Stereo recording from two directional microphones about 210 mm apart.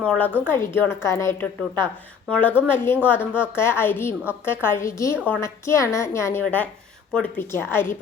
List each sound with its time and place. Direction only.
0.0 s a woman's voice: 5° left (ahead or behind)